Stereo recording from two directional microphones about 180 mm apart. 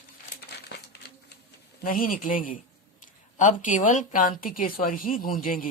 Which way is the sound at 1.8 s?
50° left (ahead or behind).